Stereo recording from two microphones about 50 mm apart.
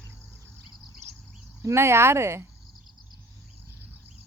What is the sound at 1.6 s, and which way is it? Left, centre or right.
Speech, right.